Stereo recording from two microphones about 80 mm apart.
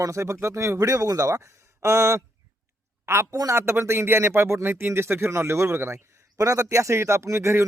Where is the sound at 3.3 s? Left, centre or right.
Right.